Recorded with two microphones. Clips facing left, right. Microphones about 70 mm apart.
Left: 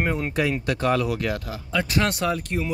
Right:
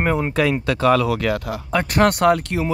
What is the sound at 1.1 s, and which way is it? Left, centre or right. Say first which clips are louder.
Speech: right 5 dB; right.